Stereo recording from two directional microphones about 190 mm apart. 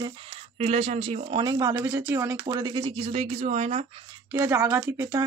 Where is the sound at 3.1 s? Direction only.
35° right (ahead or behind).